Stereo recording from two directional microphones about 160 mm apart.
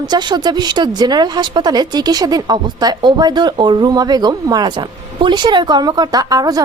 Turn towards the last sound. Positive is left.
turn(degrees=-25)  # may be behind; listen again after turning